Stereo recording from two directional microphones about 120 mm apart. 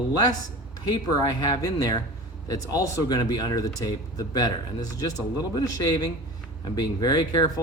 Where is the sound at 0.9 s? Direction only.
35° left (ahead or behind).